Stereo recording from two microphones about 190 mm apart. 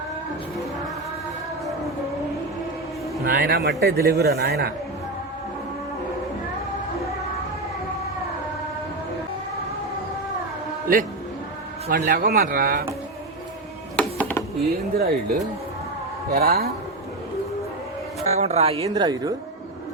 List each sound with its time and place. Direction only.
3.2 s speech: 50° right (ahead or behind)
11.9 s speech: 50° right (ahead or behind)
13.9 s music: 10° left (ahead or behind)
14.9 s speech: 50° right (ahead or behind)
18.3 s speech: 35° right (ahead or behind)